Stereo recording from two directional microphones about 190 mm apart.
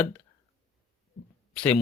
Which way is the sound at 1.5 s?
5° left (ahead or behind).